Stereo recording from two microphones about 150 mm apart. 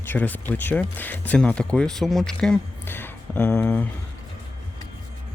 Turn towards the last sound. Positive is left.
turn(degrees=10)  # may be behind; listen again after turning